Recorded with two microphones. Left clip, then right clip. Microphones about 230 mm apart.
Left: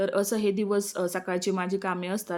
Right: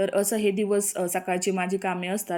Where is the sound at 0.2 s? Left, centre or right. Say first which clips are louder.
Right 2 dB; left.